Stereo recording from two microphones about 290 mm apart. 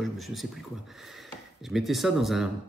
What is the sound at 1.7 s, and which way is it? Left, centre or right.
Speech, centre.